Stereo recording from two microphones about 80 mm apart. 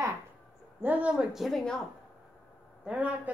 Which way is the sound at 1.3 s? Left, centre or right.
Centre.